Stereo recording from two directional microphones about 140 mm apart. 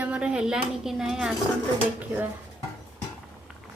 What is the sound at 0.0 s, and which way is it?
A woman's voice, 5° right (ahead or behind).